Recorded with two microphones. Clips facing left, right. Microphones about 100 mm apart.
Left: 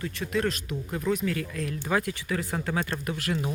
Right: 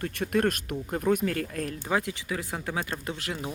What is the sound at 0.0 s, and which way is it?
Speech, 55° right (ahead or behind).